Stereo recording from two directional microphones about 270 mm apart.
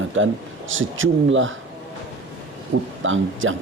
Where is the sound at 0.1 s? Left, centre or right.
Right.